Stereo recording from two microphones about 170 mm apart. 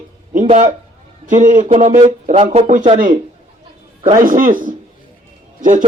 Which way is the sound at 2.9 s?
55° right (ahead or behind).